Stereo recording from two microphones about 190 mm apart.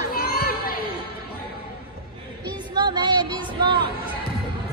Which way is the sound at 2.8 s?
25° right (ahead or behind).